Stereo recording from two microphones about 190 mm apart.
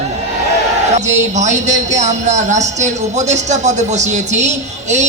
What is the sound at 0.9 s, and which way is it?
Speech, 40° right (ahead or behind).